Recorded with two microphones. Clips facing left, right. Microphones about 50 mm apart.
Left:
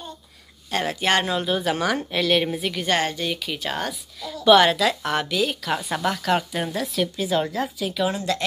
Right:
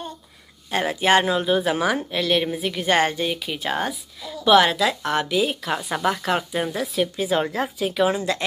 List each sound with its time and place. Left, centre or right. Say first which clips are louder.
0.7 s a woman's voice: right 3 dB; centre
2.9 s a woman's voice: right 4 dB; right
7.2 s a woman's voice: even; right